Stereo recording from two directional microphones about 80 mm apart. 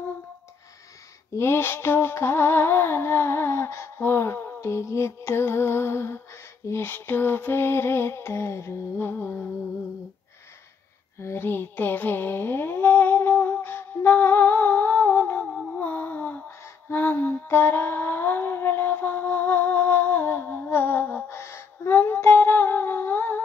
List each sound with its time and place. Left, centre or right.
1.3 s music: left
11.1 s a sound: left
16.4 s lullaby: left